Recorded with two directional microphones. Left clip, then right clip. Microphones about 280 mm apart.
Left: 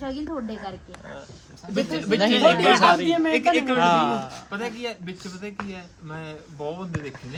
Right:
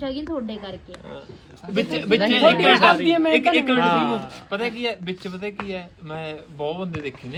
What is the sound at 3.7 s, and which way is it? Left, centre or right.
Speech, left.